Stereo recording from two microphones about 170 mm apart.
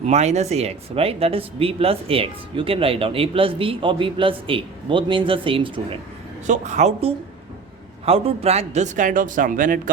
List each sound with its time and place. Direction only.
0.0 s speech: 40° right (ahead or behind)
6.5 s a man's voice: 45° right (ahead or behind)